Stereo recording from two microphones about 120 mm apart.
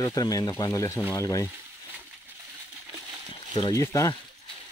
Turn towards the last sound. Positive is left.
turn(degrees=25)  # may be behind; listen again after turning